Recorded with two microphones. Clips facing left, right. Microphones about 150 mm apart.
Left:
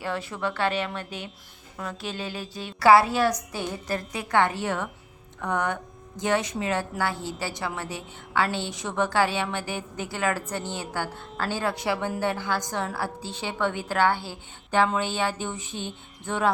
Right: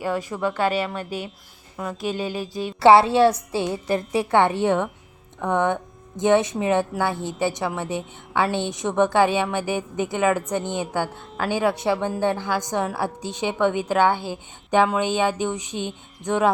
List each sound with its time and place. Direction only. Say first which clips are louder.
0.0 s a woman's voice: right 5 dB; 10° right (ahead or behind)
2.8 s a woman's voice: right 4 dB; 25° right (ahead or behind)